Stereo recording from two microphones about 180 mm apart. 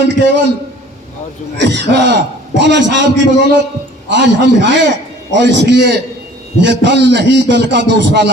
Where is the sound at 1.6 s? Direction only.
70° right (ahead or behind).